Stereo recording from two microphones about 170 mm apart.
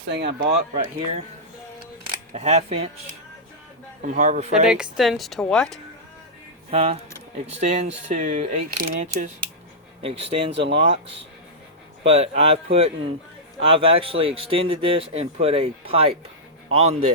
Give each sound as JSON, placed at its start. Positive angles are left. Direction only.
{"t": 0.0, "sound": "speech", "side_deg": -90}
{"t": 0.3, "sound": "speech", "side_deg": -45}
{"t": 2.3, "sound": "speech", "side_deg": -40}
{"t": 4.0, "sound": "speech", "side_deg": -50}
{"t": 4.6, "sound": "a woman's voice", "side_deg": -5}
{"t": 6.7, "sound": "speech", "side_deg": -35}
{"t": 12.0, "sound": "speech", "side_deg": -35}